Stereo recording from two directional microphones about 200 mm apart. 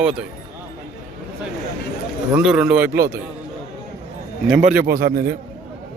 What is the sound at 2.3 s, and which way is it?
Speech, 5° right (ahead or behind).